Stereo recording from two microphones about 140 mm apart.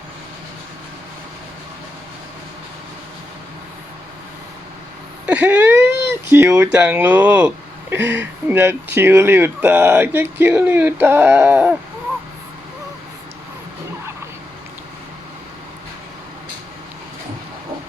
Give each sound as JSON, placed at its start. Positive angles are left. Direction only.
{"t": 5.2, "sound": "speech", "side_deg": -10}